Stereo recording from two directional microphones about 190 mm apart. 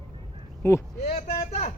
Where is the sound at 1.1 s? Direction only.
35° left (ahead or behind).